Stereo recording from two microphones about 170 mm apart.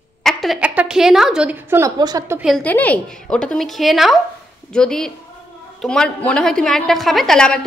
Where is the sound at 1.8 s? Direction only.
20° right (ahead or behind).